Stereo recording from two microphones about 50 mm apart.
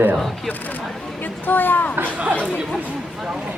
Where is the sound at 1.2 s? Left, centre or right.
Left.